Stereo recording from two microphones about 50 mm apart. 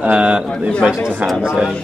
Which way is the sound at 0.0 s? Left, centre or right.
Right.